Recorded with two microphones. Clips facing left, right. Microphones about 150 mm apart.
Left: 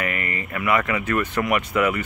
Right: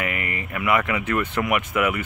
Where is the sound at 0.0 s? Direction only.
15° right (ahead or behind).